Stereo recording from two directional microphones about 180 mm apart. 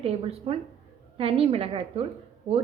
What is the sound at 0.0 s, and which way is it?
A woman's voice, 35° right (ahead or behind).